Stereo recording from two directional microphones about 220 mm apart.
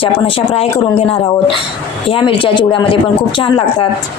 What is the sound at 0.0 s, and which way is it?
Speech, 25° left (ahead or behind).